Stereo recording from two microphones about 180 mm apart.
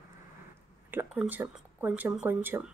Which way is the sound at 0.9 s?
10° right (ahead or behind).